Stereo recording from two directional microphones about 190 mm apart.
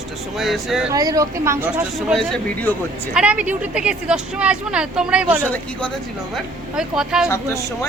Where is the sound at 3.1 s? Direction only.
5° right (ahead or behind).